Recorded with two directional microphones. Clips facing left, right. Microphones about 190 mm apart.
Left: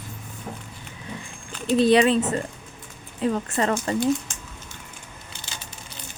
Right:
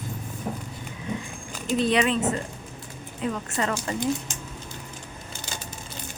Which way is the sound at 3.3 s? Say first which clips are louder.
Left 4 dB; 35° left (ahead or behind).